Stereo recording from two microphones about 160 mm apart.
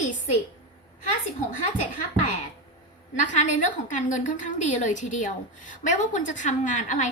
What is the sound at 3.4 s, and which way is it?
A woman's voice, 55° left (ahead or behind).